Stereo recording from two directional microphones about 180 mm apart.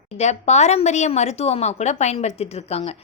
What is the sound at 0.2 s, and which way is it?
Speech, 40° left (ahead or behind).